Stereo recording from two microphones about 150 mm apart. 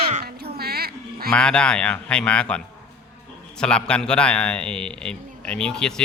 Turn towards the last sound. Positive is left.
turn(degrees=5)  # may be behind; listen again after turning